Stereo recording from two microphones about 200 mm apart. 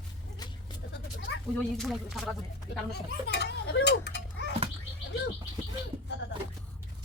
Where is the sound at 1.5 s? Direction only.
Centre (ahead or behind).